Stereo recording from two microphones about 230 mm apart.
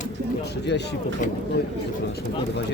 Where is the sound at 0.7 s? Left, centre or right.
Left.